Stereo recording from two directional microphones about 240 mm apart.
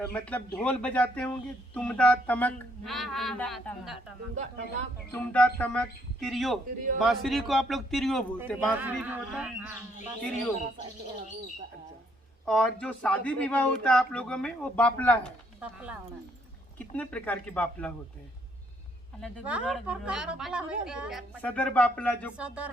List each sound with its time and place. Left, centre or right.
0.1 s speech: centre
4.4 s speech: right
5.1 s a man's voice: centre
12.5 s speech: centre
15.6 s speech: centre
16.7 s speech: centre
19.2 s speech: centre
22.4 s speech: centre